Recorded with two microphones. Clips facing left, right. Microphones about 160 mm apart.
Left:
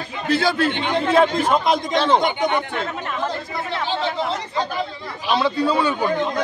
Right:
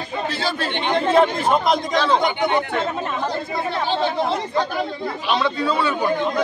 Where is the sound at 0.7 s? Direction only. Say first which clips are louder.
Even; 30° right (ahead or behind).